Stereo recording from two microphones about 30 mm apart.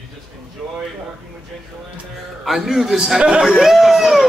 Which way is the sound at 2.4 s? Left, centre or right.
Centre.